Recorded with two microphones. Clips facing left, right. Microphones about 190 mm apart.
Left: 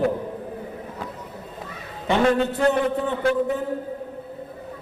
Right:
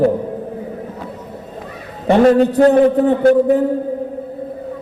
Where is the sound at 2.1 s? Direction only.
40° right (ahead or behind).